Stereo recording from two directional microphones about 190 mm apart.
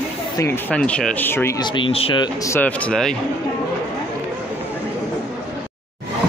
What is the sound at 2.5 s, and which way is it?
Speech, 10° left (ahead or behind).